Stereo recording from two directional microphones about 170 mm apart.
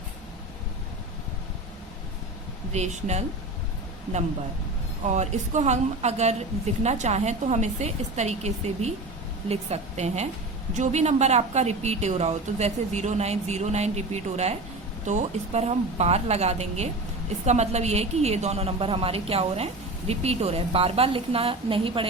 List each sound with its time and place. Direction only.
2.7 s a woman's voice: 40° right (ahead or behind)
5.0 s a woman's voice: 45° right (ahead or behind)